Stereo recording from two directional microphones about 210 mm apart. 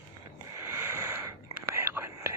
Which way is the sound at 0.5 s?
10° right (ahead or behind).